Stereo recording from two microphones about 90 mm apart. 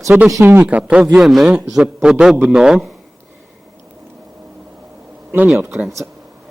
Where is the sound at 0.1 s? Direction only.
15° right (ahead or behind).